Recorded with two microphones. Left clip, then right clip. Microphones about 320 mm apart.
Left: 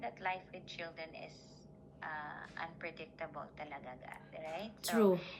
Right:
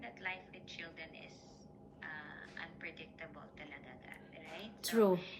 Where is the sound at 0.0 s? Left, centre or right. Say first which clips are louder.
Left 4 dB; centre.